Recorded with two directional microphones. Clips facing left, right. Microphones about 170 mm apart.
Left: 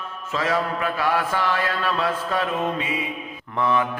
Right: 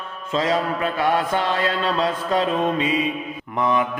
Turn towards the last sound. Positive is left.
turn(degrees=-20)  # may be behind; listen again after turning